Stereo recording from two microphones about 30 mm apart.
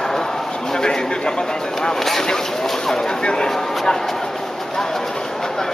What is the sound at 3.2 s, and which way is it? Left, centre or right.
Speech, left.